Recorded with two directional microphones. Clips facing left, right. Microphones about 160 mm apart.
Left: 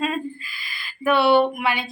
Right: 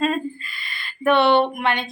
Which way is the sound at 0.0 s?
5° left (ahead or behind).